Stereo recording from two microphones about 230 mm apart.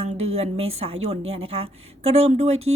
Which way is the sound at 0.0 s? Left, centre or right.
Right.